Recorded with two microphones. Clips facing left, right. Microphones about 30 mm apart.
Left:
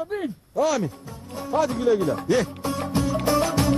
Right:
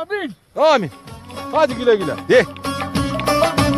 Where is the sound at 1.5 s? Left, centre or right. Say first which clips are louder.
Right 6 dB; right.